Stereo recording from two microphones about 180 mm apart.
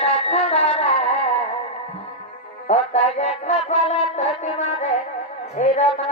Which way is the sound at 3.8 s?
35° left (ahead or behind).